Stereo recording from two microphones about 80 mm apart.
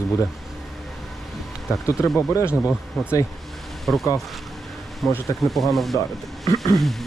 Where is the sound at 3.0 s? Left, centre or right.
Centre.